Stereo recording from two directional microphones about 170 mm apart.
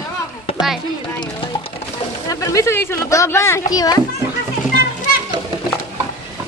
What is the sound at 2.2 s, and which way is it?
A child's voice, 20° left (ahead or behind).